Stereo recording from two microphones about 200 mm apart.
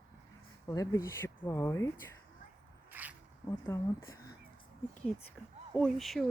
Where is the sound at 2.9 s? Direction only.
10° right (ahead or behind).